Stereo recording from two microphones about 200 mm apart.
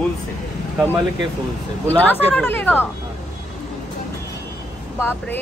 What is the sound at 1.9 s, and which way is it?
Speech, 10° left (ahead or behind).